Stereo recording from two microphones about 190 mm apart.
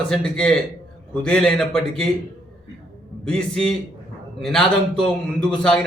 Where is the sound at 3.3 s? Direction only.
5° left (ahead or behind).